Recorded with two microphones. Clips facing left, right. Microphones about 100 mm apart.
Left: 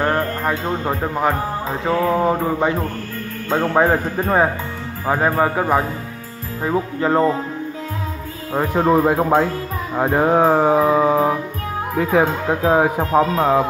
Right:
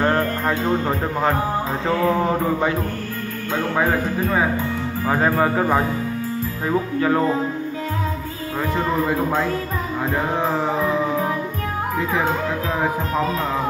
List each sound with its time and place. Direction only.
0.0 s speech: 15° left (ahead or behind)
3.5 s speech: 30° left (ahead or behind)
5.0 s speech: 15° left (ahead or behind)
8.7 s music: 60° left (ahead or behind)